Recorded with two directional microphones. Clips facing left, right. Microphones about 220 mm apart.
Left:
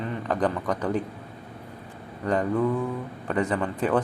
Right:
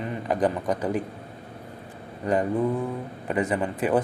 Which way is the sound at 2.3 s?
20° right (ahead or behind).